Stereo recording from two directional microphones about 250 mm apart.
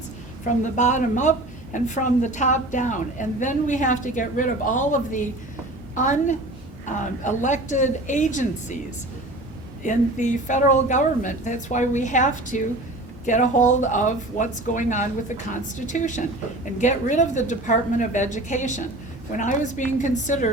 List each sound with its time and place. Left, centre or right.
0.4 s a woman's voice: left
9.8 s a woman's voice: left